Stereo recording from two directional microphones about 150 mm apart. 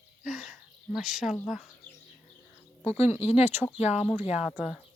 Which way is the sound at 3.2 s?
45° left (ahead or behind).